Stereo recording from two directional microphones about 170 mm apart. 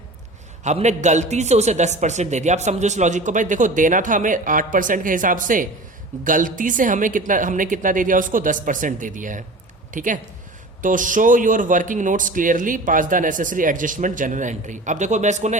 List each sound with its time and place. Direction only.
0.6 s a man's voice: 40° right (ahead or behind)